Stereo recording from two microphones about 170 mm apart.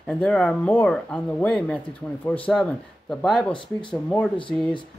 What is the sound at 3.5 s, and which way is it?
Speech, 30° left (ahead or behind).